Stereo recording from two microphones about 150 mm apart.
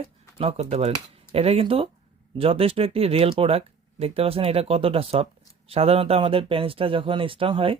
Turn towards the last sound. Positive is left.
turn(degrees=-35)  # may be behind; listen again after turning